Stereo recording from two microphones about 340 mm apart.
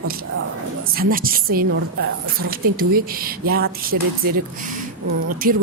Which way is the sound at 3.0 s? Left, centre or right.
Right.